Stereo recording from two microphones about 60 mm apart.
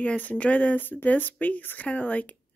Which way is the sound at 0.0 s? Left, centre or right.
Left.